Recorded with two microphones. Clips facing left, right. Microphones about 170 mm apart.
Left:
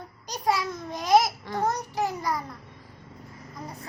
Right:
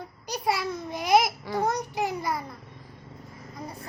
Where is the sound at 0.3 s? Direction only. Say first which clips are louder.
Left 1 dB; 10° right (ahead or behind).